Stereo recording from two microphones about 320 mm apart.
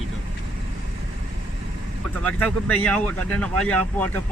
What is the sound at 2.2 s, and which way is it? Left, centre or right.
Speech, centre.